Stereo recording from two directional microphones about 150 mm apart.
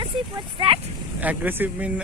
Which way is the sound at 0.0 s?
35° right (ahead or behind).